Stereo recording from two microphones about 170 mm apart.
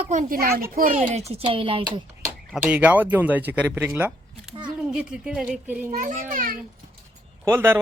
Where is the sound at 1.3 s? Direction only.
30° right (ahead or behind).